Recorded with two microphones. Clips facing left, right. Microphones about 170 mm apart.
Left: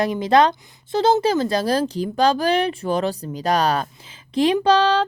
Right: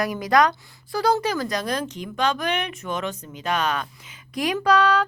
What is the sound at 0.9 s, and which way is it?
Speech, 25° left (ahead or behind).